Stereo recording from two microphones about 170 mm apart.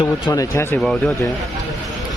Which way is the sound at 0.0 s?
20° left (ahead or behind).